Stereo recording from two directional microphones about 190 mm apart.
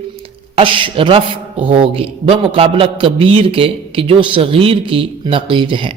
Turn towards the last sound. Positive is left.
turn(degrees=-25)  # may be behind; listen again after turning